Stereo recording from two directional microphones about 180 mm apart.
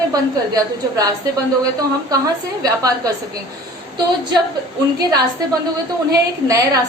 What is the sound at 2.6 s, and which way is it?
Speech, 20° right (ahead or behind).